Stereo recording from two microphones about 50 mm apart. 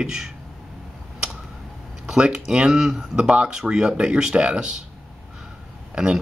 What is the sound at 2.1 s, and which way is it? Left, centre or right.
Speech, centre.